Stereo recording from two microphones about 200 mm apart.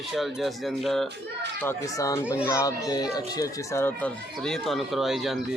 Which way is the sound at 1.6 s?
15° left (ahead or behind).